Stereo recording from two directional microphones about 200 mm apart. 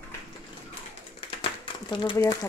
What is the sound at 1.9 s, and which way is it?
Speech, 20° left (ahead or behind).